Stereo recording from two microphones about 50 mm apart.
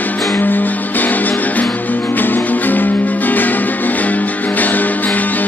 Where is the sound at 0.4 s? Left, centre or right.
Left.